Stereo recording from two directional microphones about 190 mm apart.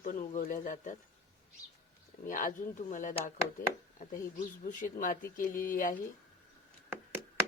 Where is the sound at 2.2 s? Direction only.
45° left (ahead or behind).